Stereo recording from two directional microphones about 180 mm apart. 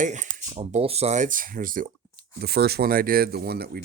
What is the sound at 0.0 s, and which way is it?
Speech, 45° right (ahead or behind).